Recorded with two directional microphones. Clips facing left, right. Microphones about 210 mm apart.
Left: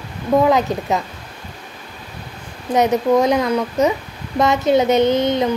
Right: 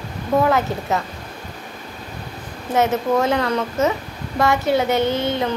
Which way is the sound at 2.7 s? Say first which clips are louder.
Left 3 dB; 15° left (ahead or behind).